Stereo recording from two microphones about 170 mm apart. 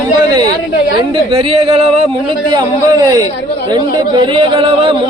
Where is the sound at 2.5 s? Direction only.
20° right (ahead or behind).